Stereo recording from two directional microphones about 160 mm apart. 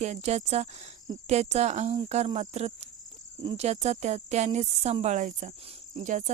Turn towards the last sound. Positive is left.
turn(degrees=-50)  # may be behind; listen again after turning